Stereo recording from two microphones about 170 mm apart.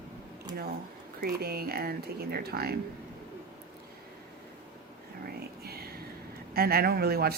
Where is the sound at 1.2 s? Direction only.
65° right (ahead or behind).